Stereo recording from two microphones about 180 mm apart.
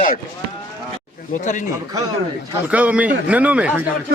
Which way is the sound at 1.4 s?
45° left (ahead or behind).